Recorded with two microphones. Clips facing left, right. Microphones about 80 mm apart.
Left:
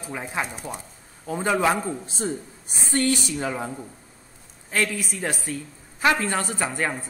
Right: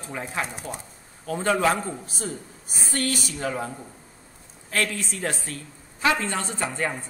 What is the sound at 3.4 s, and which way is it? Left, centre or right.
Speech, centre.